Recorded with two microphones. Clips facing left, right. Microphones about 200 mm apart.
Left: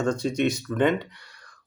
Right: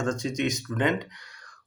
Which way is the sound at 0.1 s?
60° left (ahead or behind).